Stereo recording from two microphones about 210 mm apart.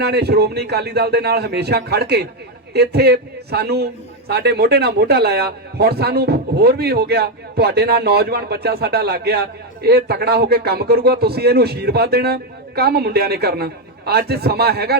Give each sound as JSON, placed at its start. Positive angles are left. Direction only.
{"t": 0.0, "sound": "a man's voice", "side_deg": -50}